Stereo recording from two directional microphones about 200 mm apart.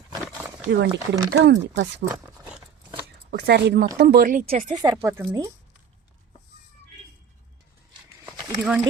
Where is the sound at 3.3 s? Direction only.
55° right (ahead or behind); by 4.7 s 40° right (ahead or behind).